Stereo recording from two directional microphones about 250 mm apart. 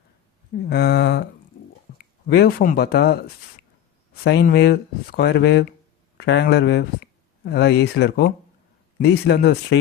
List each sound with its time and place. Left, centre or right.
0.6 s speech: left
4.2 s speech: left